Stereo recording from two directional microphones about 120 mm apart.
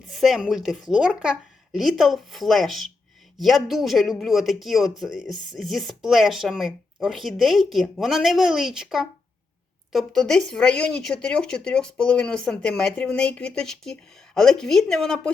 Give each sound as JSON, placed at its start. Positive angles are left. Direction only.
{"t": 0.1, "sound": "speech", "side_deg": 0}